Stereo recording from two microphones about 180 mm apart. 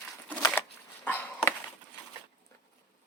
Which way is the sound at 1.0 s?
10° left (ahead or behind).